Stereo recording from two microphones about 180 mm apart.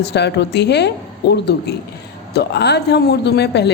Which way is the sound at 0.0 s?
70° left (ahead or behind).